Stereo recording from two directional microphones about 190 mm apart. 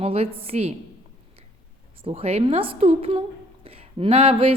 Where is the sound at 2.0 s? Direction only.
30° right (ahead or behind).